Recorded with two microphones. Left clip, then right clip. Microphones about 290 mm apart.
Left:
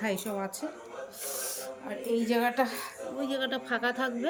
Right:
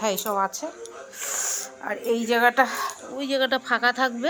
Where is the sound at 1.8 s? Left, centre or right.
Right.